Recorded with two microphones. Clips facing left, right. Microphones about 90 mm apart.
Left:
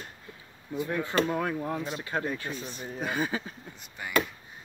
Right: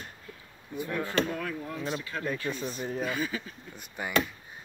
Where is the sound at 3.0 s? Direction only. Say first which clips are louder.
Left 4 dB; 35° left (ahead or behind).